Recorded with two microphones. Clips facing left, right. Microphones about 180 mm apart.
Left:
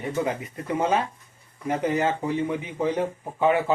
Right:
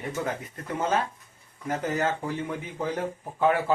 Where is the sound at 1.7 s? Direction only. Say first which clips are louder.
Left 3 dB; 10° left (ahead or behind).